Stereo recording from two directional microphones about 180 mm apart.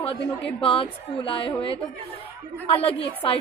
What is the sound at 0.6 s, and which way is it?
Speech, 30° left (ahead or behind).